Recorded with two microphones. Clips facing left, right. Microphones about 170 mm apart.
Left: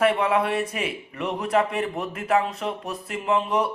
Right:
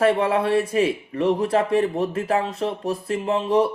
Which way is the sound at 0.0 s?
30° right (ahead or behind).